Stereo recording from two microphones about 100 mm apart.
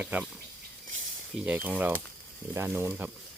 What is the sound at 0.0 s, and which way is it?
Speech, 10° right (ahead or behind).